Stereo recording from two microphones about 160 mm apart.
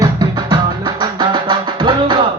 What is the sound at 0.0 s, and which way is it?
Music, 25° right (ahead or behind).